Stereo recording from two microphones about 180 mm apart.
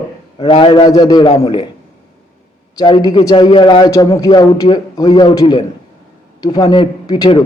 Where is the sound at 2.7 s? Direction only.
25° left (ahead or behind).